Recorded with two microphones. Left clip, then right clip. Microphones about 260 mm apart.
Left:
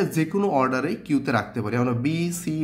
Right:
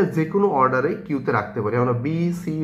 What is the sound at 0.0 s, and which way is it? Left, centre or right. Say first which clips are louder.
Speech: right 4 dB; left.